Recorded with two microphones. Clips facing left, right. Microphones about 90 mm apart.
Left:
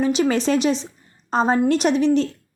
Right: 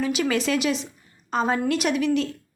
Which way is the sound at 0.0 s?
35° left (ahead or behind).